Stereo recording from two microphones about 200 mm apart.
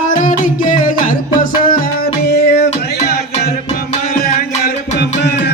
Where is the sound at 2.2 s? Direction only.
55° left (ahead or behind).